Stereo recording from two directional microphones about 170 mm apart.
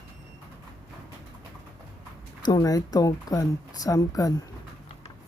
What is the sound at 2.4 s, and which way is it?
A woman's voice, 20° left (ahead or behind).